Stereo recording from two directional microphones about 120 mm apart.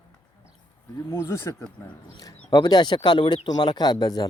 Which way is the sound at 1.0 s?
25° left (ahead or behind).